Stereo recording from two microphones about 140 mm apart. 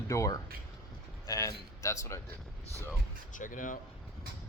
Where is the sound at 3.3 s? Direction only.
70° left (ahead or behind).